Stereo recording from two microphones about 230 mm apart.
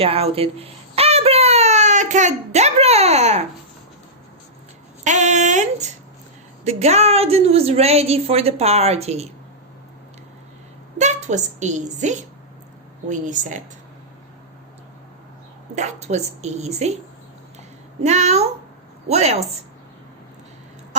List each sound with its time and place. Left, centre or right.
0.0 s speech: right
5.0 s a sound: right
6.7 s a woman's voice: right
10.9 s a woman's voice: right
15.7 s a woman's voice: right
18.0 s a woman's voice: right